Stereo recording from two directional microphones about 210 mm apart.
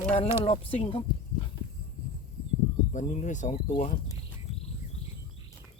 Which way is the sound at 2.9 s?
35° left (ahead or behind).